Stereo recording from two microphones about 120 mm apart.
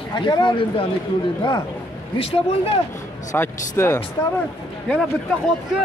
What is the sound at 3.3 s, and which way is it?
Speech, 20° left (ahead or behind).